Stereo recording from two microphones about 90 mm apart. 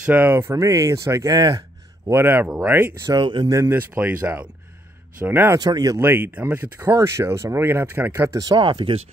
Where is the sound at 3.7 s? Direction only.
20° right (ahead or behind).